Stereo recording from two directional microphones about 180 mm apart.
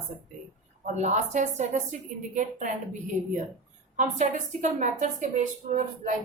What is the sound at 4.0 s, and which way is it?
A woman's voice, 45° right (ahead or behind).